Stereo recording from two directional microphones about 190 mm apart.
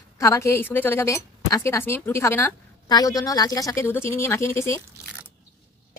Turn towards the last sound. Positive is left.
turn(degrees=15)  # may be behind; listen again after turning